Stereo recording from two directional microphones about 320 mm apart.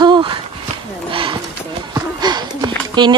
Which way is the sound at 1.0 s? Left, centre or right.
Centre.